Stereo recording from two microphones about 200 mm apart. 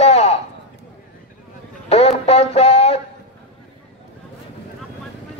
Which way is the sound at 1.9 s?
30° left (ahead or behind).